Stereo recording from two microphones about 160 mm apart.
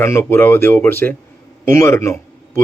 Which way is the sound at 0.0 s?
15° left (ahead or behind).